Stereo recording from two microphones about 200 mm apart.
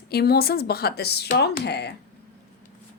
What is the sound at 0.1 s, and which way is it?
Speech, 50° left (ahead or behind).